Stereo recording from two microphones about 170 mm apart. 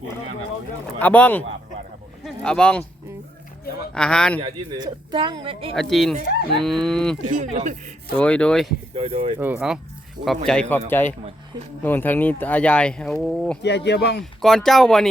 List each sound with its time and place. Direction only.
0.9 s speech: 10° left (ahead or behind)
3.9 s speech: 5° left (ahead or behind)
4.4 s speech: 30° right (ahead or behind)
5.9 s speech: centre (ahead or behind)
7.5 s a man's voice: 45° right (ahead or behind)
8.1 s speech: 5° left (ahead or behind)
9.0 s speech: 35° right (ahead or behind)
9.4 s speech: 5° right (ahead or behind)
13.6 s speech: 85° left
14.4 s speech: centre (ahead or behind)